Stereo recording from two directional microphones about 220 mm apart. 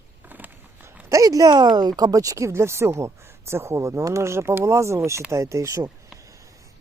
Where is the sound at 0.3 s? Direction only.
10° right (ahead or behind).